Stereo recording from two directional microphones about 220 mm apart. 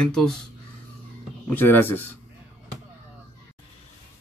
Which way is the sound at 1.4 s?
10° left (ahead or behind).